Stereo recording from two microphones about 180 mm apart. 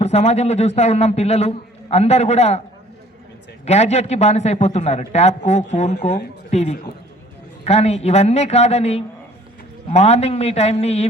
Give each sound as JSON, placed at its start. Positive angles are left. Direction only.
{"t": 0.0, "sound": "a man's voice", "side_deg": 40}
{"t": 3.7, "sound": "a man's voice", "side_deg": 40}